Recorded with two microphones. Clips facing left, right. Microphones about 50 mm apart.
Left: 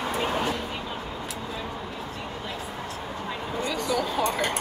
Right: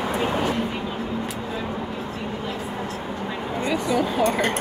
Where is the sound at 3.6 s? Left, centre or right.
Right.